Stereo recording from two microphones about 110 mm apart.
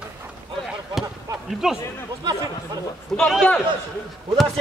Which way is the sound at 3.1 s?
5° left (ahead or behind).